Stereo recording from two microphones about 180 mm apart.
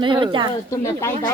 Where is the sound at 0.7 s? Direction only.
15° left (ahead or behind).